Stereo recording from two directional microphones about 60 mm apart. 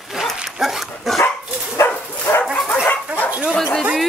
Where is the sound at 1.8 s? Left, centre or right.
Left.